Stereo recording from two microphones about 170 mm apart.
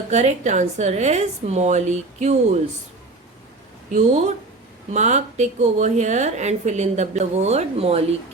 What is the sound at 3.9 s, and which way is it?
A woman's voice, 40° right (ahead or behind).